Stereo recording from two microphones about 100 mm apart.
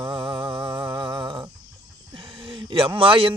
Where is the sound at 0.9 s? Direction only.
45° right (ahead or behind).